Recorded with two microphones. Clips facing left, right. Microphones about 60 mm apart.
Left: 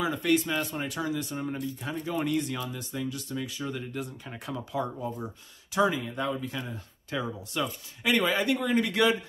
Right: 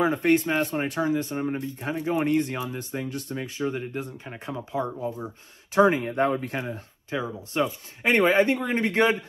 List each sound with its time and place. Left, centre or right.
0.0 s speech: right
5.9 s speech: right
7.1 s speech: right